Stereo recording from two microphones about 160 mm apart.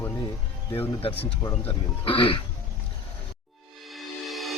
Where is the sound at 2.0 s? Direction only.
35° left (ahead or behind).